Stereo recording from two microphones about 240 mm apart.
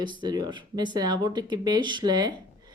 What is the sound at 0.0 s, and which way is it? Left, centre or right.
Speech, centre.